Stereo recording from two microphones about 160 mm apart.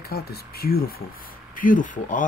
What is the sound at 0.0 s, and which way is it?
Speech, 75° left (ahead or behind).